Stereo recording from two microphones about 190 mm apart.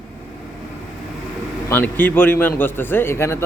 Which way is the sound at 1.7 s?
10° left (ahead or behind).